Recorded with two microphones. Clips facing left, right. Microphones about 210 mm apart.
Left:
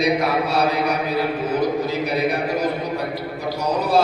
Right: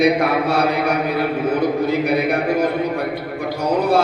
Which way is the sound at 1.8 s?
55° right (ahead or behind).